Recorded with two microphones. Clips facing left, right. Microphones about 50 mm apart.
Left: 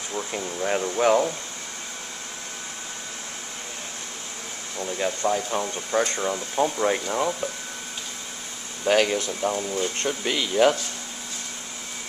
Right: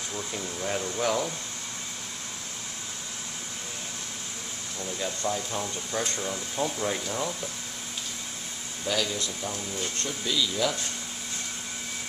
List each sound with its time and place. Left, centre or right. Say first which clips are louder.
0.1 s speech: left 6 dB; left
4.7 s speech: left 6 dB; left
8.8 s speech: left 9 dB; left
10.0 s speech: left 3 dB; left